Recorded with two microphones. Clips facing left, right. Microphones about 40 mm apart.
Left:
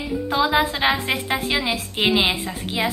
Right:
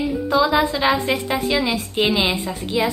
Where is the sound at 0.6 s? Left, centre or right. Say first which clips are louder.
Right 2 dB; left.